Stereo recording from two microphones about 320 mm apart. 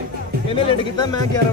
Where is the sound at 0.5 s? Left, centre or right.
Centre.